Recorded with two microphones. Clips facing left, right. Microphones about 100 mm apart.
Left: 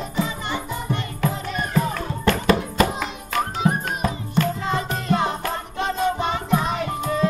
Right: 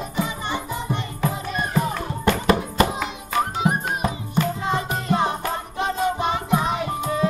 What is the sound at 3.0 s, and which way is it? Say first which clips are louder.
Music: right 1 dB; 15° right (ahead or behind).